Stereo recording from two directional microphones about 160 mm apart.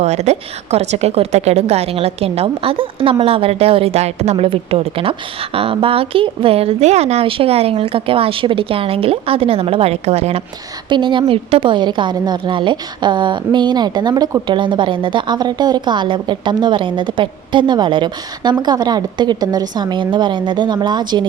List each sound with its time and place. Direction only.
0.0 s a woman's voice: 45° right (ahead or behind)
10.8 s a woman's voice: 30° right (ahead or behind)